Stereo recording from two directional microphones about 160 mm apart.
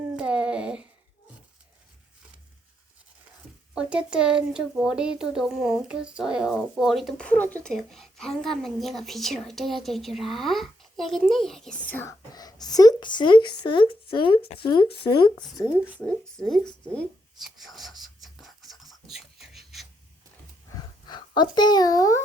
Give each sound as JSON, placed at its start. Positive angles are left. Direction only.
{"t": 0.0, "sound": "a sound", "side_deg": -5}
{"t": 3.8, "sound": "a woman's voice", "side_deg": -5}
{"t": 12.3, "sound": "speech", "side_deg": 25}
{"t": 16.0, "sound": "a woman's voice", "side_deg": 5}
{"t": 16.8, "sound": "writing", "side_deg": 5}
{"t": 21.1, "sound": "speech", "side_deg": 30}